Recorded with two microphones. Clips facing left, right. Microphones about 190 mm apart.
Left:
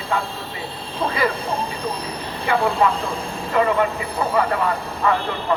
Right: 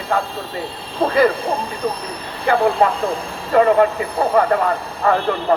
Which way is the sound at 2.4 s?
45° right (ahead or behind).